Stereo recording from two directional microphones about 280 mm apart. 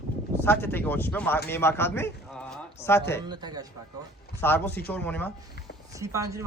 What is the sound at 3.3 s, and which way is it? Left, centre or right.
Speech, centre.